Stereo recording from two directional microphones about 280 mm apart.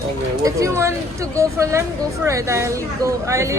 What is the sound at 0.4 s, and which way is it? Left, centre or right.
A woman's voice, centre.